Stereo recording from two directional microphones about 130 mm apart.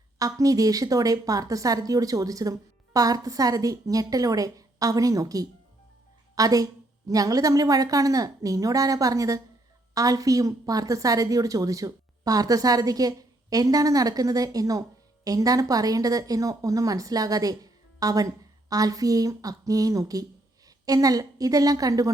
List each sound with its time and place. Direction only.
0.2 s a woman's voice: 25° right (ahead or behind)